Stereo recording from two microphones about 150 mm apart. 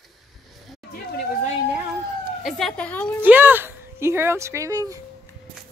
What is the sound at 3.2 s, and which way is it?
Speech, 15° right (ahead or behind).